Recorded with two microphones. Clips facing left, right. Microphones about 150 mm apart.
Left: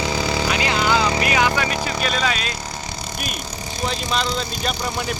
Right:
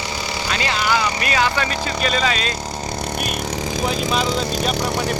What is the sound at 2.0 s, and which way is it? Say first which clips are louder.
Speech: right 4 dB; centre (ahead or behind).